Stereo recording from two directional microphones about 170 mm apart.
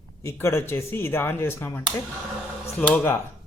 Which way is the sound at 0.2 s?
15° left (ahead or behind).